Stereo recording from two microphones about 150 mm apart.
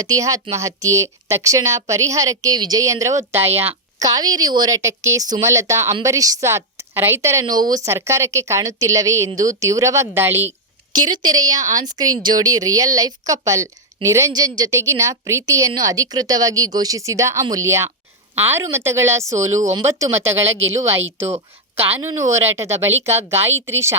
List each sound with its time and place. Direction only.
0.0 s a woman's voice: 25° right (ahead or behind)
4.0 s a woman's voice: 25° right (ahead or behind)
10.9 s a woman's voice: 30° right (ahead or behind)
22.3 s speech: 45° right (ahead or behind)
23.3 s a woman's voice: 15° right (ahead or behind)